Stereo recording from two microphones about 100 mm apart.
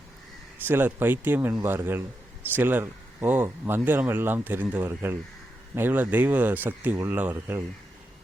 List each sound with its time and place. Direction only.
0.7 s speech: 20° right (ahead or behind)